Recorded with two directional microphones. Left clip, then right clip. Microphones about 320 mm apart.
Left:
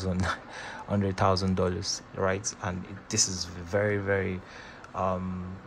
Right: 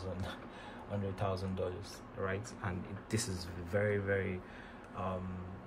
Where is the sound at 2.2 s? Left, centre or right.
Centre.